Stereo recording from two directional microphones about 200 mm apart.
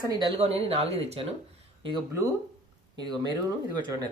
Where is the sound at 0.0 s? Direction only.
20° right (ahead or behind).